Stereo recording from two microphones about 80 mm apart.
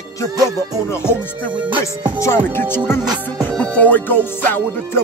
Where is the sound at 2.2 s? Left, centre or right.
Left.